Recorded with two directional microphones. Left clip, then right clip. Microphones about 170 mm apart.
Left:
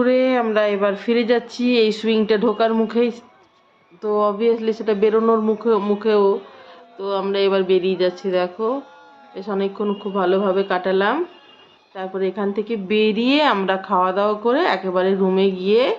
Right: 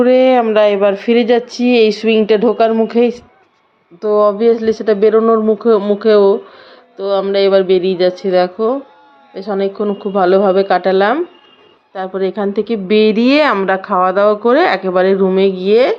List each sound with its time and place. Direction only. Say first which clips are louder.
0.0 s speech: right 8 dB; 25° right (ahead or behind)